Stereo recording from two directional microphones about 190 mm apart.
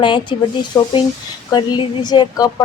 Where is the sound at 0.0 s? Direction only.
25° left (ahead or behind).